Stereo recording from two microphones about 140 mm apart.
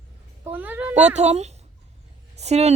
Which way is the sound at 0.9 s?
55° right (ahead or behind).